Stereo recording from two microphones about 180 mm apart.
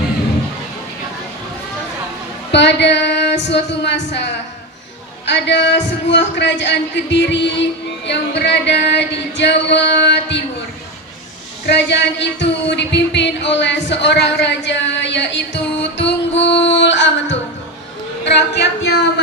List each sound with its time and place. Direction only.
2.5 s female singing: 75° left (ahead or behind)
3.5 s a man's voice: 75° left (ahead or behind)
11.6 s music: 75° left (ahead or behind)
18.3 s a man's voice: 70° left (ahead or behind)